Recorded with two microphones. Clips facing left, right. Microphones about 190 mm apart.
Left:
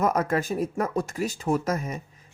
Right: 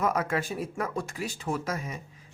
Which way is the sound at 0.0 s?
40° left (ahead or behind).